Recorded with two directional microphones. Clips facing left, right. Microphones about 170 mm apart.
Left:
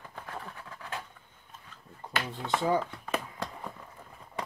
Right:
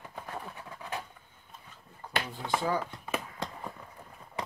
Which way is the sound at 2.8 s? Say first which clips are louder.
Left 2 dB; 10° right (ahead or behind).